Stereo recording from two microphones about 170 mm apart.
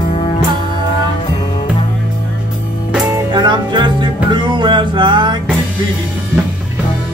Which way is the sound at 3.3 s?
25° right (ahead or behind).